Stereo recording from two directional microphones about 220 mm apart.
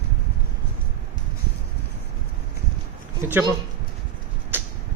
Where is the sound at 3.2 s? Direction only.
10° right (ahead or behind).